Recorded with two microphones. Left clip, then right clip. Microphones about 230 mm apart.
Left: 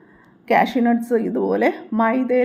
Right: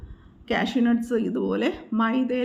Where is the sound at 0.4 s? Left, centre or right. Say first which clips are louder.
Left 8 dB; centre.